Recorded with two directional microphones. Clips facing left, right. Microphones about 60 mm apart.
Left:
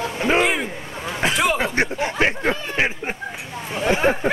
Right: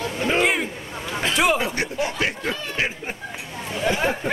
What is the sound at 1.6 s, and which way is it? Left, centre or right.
Speech, left.